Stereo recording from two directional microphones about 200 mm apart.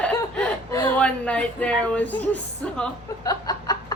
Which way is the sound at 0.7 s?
15° left (ahead or behind).